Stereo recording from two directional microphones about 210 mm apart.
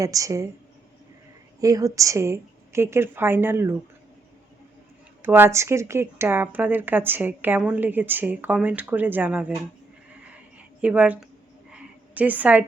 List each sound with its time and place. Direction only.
0.0 s speech: 15° right (ahead or behind)
1.6 s speech: 15° right (ahead or behind)
5.2 s speech: 10° right (ahead or behind)
10.8 s speech: 5° right (ahead or behind)
11.7 s a sound: 5° right (ahead or behind)